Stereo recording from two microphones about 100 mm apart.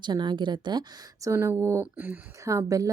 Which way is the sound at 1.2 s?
30° right (ahead or behind).